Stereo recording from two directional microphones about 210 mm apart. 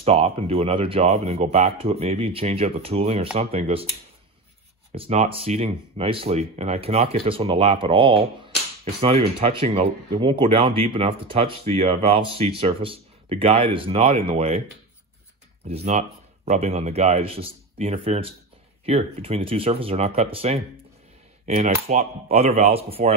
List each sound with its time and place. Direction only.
0.0 s speech: 30° right (ahead or behind)
4.9 s speech: 30° right (ahead or behind)
15.6 s speech: 30° right (ahead or behind)
21.5 s chopping: 30° right (ahead or behind)
21.8 s speech: 30° right (ahead or behind)